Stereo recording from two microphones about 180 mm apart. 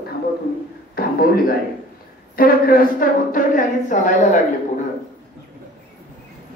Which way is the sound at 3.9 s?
45° left (ahead or behind).